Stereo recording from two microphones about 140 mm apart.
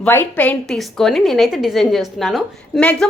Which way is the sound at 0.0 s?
15° left (ahead or behind).